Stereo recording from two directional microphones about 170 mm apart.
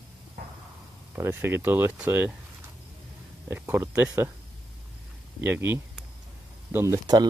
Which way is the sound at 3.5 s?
10° right (ahead or behind).